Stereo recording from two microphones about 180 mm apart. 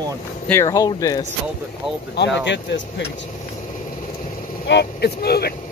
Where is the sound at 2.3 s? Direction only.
75° left (ahead or behind).